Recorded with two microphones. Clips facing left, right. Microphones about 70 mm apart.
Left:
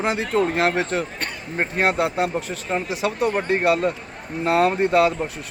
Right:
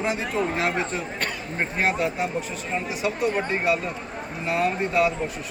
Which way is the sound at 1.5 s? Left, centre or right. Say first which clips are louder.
Left 4 dB; left.